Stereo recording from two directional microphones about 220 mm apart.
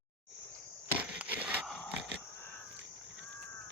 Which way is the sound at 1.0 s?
5° right (ahead or behind).